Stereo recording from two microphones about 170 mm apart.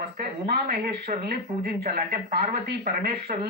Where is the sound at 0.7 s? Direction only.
60° right (ahead or behind).